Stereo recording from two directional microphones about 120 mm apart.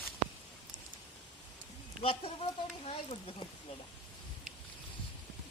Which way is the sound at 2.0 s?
50° left (ahead or behind).